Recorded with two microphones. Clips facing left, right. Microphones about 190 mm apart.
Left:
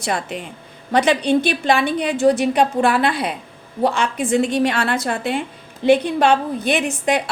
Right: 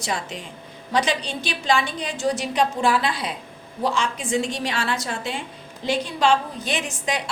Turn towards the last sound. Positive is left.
turn(degrees=60)  # may be behind; listen again after turning